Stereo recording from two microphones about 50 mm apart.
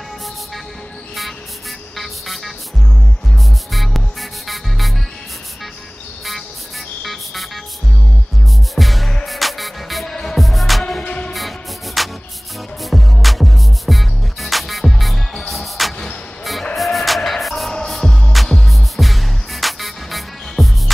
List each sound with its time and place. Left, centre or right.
2.0 s music: centre
3.7 s music: centre
7.0 s vehicle: centre
8.7 s music: centre
11.1 s music: left
11.3 s music: centre